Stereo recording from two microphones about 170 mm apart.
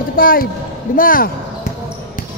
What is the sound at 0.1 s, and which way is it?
Speech, 55° left (ahead or behind).